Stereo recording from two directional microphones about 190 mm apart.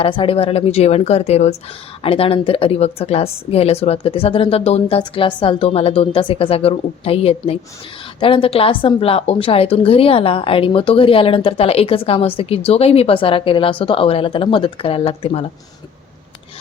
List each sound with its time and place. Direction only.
0.0 s a woman's voice: 30° left (ahead or behind)